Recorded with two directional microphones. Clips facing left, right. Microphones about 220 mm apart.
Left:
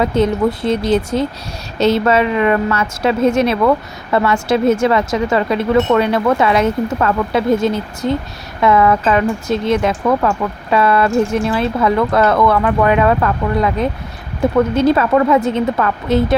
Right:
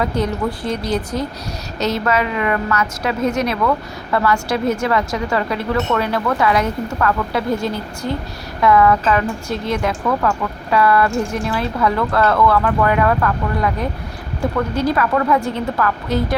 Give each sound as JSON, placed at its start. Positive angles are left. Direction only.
{"t": 0.0, "sound": "speech", "side_deg": 25}